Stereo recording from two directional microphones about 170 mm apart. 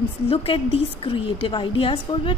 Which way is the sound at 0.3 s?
35° left (ahead or behind).